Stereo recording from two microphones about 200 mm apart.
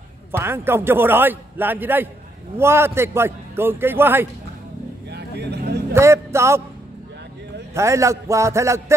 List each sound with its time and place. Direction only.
0.4 s a man's voice: 10° right (ahead or behind)
5.1 s vehicle: 55° right (ahead or behind)
5.9 s a man's voice: 15° right (ahead or behind)
7.7 s a man's voice: 15° right (ahead or behind)